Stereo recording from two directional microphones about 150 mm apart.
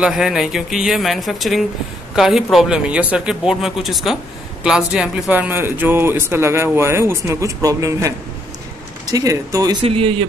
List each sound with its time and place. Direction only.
0.0 s a man's voice: 5° right (ahead or behind); by 9.8 s 25° right (ahead or behind)
9.8 s speech: 40° right (ahead or behind)